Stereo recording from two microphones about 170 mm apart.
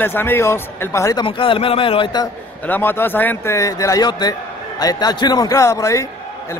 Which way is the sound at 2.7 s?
10° left (ahead or behind).